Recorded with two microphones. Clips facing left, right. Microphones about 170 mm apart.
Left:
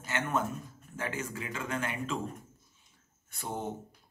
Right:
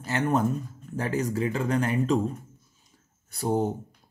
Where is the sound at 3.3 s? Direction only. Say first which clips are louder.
Right 12 dB; 35° right (ahead or behind).